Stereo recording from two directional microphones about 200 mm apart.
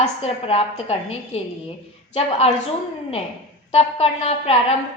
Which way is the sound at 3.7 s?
30° left (ahead or behind).